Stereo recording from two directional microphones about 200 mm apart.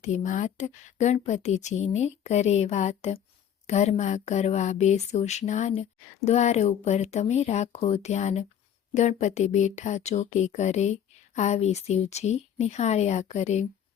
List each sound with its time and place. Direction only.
0.0 s speech: 35° left (ahead or behind)